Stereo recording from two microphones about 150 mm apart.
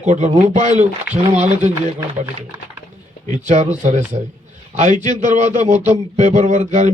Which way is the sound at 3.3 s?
50° right (ahead or behind).